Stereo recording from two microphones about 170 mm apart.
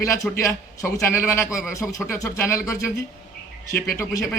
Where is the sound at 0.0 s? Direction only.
20° left (ahead or behind).